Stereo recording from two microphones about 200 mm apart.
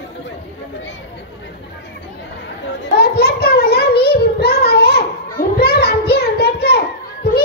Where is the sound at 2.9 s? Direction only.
50° left (ahead or behind).